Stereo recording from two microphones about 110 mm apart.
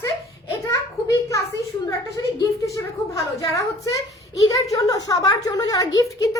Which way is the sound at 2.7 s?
30° left (ahead or behind).